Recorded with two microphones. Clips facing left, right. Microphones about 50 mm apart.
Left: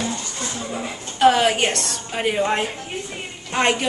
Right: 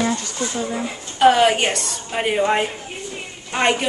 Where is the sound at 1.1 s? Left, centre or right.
Centre.